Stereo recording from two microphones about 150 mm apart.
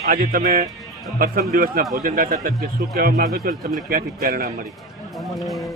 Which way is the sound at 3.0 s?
90° right.